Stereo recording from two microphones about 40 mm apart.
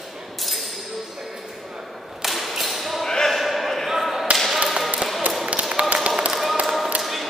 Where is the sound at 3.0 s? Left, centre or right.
Centre.